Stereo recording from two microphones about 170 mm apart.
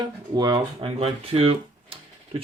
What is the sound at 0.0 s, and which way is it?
Speech, 25° right (ahead or behind).